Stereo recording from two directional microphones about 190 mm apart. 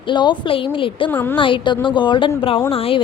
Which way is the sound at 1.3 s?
25° left (ahead or behind).